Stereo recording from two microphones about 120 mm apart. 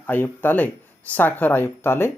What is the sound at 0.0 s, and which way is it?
Speech, 15° left (ahead or behind).